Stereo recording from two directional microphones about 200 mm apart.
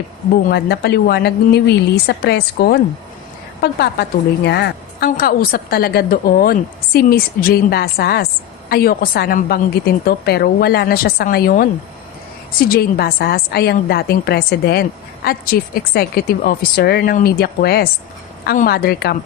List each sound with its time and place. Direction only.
0.4 s a woman's voice: 50° left (ahead or behind)